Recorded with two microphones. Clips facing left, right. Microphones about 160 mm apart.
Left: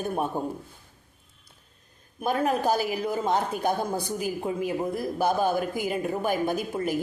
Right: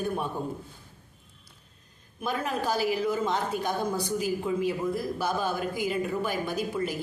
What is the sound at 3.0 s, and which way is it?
Speech, 55° left (ahead or behind).